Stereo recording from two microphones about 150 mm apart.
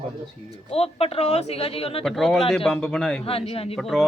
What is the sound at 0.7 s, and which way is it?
A woman's voice, 40° left (ahead or behind).